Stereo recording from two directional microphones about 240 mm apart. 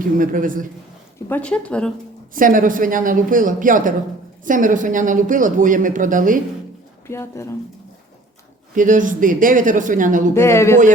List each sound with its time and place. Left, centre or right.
0.2 s speech: right
1.3 s speech: centre
2.3 s speech: right
7.1 s speech: centre
8.7 s speech: right
10.3 s speech: centre